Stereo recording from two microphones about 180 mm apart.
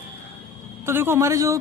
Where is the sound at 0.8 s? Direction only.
15° right (ahead or behind).